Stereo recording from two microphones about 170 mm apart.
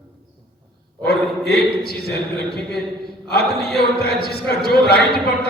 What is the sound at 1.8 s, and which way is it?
Speech, 65° left (ahead or behind).